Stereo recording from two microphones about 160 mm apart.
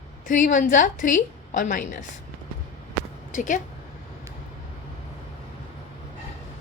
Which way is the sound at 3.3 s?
50° left (ahead or behind).